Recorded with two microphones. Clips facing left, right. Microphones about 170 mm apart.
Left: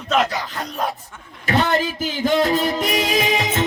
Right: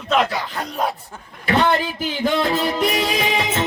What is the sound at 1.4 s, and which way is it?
Music, 40° left (ahead or behind).